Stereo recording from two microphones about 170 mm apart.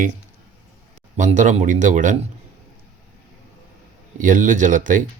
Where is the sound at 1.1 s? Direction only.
45° right (ahead or behind).